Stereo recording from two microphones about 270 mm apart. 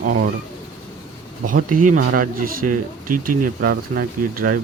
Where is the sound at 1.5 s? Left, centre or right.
Right.